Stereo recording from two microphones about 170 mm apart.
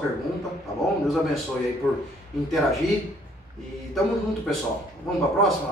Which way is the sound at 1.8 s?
10° left (ahead or behind).